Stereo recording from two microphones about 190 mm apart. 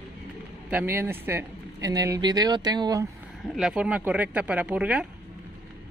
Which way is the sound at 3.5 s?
5° right (ahead or behind).